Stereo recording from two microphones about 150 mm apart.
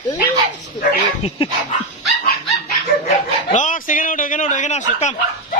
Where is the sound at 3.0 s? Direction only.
55° left (ahead or behind).